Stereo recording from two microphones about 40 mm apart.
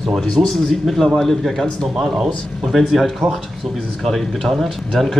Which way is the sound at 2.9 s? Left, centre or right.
Centre.